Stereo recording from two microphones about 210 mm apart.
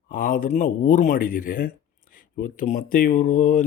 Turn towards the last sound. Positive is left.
turn(degrees=40)  # may be behind; listen again after turning